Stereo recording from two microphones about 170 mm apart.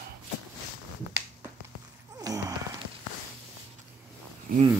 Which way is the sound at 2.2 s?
20° right (ahead or behind).